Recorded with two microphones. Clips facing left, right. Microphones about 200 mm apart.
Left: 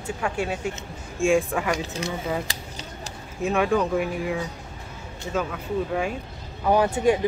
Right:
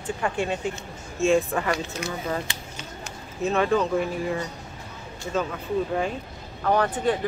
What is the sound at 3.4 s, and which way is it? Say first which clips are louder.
A woman's voice: even; 10° left (ahead or behind).